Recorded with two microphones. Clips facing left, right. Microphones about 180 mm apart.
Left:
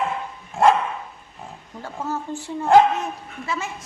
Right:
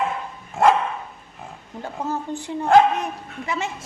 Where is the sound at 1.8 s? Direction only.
20° right (ahead or behind).